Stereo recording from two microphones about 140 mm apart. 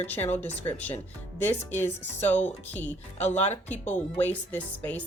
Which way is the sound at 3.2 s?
50° left (ahead or behind).